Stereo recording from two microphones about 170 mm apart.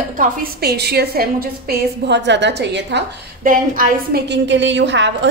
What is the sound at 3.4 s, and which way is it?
Speech, 55° right (ahead or behind).